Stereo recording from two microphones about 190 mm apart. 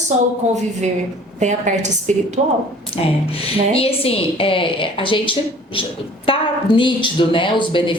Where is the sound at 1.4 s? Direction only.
40° right (ahead or behind).